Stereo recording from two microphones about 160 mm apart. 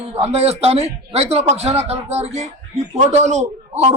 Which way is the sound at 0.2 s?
40° right (ahead or behind).